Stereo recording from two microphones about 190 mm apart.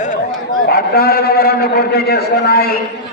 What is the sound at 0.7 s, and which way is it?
A man's voice, 55° left (ahead or behind).